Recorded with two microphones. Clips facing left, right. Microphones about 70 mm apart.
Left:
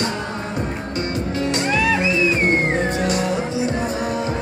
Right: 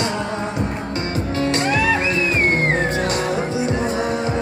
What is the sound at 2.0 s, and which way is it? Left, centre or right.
Music, right.